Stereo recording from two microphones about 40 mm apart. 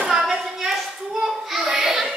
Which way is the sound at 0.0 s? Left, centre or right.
Centre.